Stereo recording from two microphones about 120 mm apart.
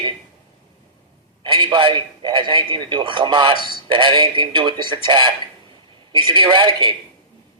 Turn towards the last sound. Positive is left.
turn(degrees=-45)  # may be behind; listen again after turning